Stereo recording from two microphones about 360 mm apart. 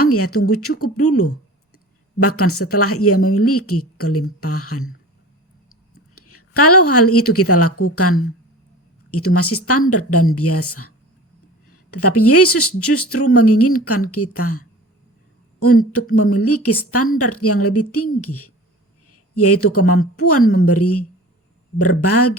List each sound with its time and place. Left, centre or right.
0.0 s a woman's voice: left
6.1 s a woman's voice: left
15.6 s a woman's voice: left